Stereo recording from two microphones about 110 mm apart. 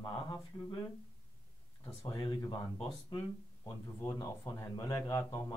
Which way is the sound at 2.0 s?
50° left (ahead or behind).